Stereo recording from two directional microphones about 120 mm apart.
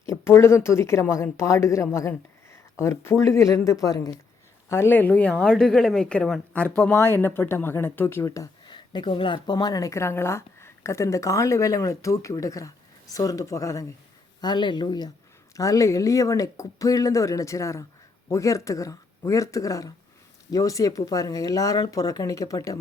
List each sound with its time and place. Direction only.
0.0 s a woman's voice: 20° left (ahead or behind)
4.7 s a woman's voice: 20° left (ahead or behind)
8.6 s a woman's voice: 40° left (ahead or behind)
14.4 s a woman's voice: 40° left (ahead or behind)